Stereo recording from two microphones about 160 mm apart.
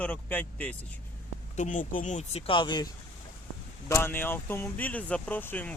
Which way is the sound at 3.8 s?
15° left (ahead or behind).